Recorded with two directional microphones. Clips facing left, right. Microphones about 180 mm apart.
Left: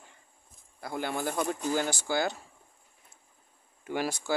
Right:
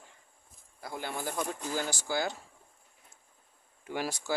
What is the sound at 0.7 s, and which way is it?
Speech, 60° left (ahead or behind).